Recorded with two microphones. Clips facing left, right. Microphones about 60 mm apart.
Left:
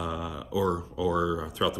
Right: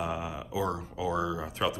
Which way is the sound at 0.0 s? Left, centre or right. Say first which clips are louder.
Even; right.